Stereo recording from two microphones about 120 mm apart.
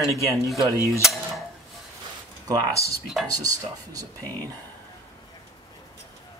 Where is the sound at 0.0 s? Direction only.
25° right (ahead or behind).